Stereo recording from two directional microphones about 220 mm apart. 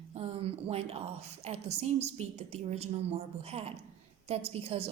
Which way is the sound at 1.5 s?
30° right (ahead or behind).